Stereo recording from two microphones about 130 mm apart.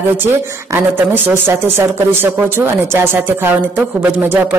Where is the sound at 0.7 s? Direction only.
15° right (ahead or behind).